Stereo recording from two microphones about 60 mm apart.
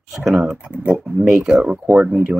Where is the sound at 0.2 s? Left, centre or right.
Centre.